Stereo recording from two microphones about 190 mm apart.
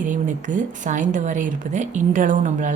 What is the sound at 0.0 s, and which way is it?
Speech, 40° right (ahead or behind).